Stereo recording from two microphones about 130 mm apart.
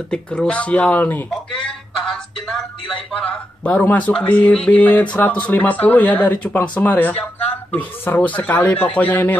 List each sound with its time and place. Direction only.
0.1 s speech: 10° left (ahead or behind)